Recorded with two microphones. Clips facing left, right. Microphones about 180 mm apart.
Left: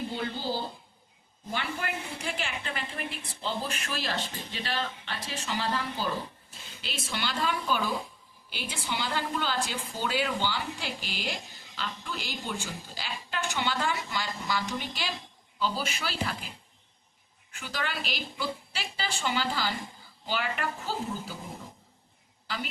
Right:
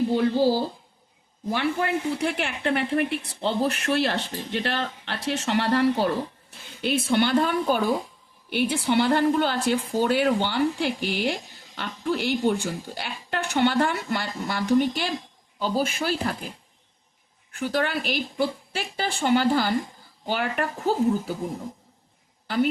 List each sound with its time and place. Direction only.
0.1 s speech: 80° right
2.2 s speech: 60° right (ahead or behind)
6.5 s speech: 55° right (ahead or behind)
17.5 s speech: 55° right (ahead or behind)
22.4 s a woman's voice: 55° right (ahead or behind)